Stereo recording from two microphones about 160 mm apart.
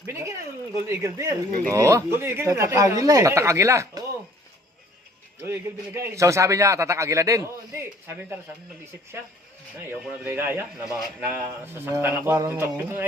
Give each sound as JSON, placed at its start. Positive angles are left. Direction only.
{"t": 0.0, "sound": "a sound", "side_deg": -15}
{"t": 0.9, "sound": "a man's voice", "side_deg": -20}
{"t": 5.4, "sound": "a man's voice", "side_deg": -15}
{"t": 9.8, "sound": "speech", "side_deg": -10}